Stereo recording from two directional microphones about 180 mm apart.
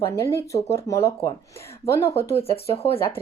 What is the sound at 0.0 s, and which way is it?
Speech, 15° left (ahead or behind).